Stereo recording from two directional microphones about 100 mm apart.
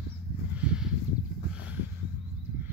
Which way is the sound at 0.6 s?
10° right (ahead or behind).